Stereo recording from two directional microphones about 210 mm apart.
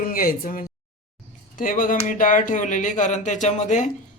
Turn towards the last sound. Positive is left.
turn(degrees=35)  # may be behind; listen again after turning